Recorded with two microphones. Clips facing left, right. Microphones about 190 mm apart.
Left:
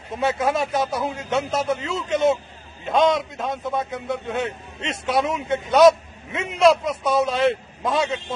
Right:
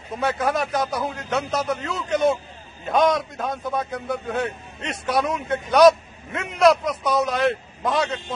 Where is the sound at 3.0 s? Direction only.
Centre (ahead or behind).